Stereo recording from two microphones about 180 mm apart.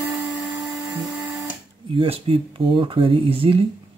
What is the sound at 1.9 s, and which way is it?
Speech, 30° right (ahead or behind).